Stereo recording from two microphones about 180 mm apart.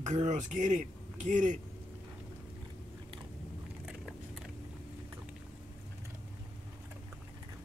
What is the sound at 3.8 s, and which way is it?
Biting, centre (ahead or behind).